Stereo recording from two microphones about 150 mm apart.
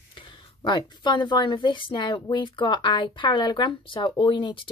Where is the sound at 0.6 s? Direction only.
30° left (ahead or behind).